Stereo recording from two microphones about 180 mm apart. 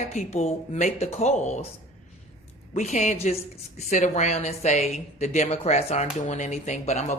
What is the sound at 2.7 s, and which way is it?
A woman's voice, 40° left (ahead or behind).